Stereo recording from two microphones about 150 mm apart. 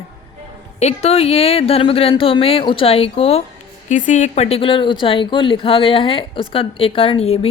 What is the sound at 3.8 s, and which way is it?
Speech, 55° left (ahead or behind).